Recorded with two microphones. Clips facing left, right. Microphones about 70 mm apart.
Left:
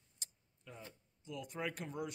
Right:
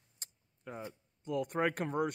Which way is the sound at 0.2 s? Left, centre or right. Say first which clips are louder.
Right 7 dB; right.